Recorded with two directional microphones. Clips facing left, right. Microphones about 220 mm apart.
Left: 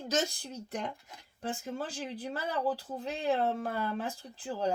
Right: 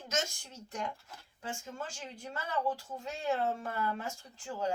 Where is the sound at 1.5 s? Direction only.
35° left (ahead or behind).